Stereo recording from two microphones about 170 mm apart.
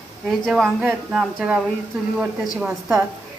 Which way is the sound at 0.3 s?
Centre (ahead or behind).